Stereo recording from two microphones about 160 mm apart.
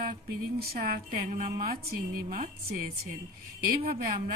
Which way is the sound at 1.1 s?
55° right (ahead or behind).